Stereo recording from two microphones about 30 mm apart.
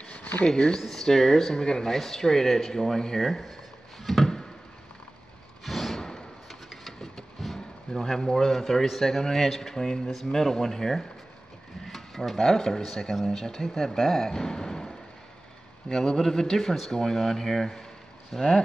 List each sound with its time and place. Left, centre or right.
0.1 s a sound: left
0.7 s speech: centre
1.9 s speech: centre
3.2 s speech: centre
4.0 s a sound: centre
5.6 s a sound: centre
6.9 s vehicle: centre
7.9 s speech: centre
9.0 s speech: centre
11.8 s a sound: centre
12.4 s speech: centre
12.8 s speech: centre
16.9 s speech: centre
18.3 s speech: centre